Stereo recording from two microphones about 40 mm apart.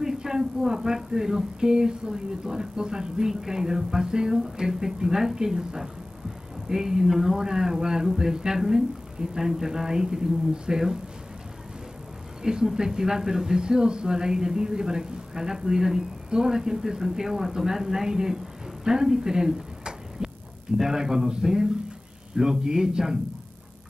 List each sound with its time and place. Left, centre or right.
0.0 s speech: centre
12.4 s speech: centre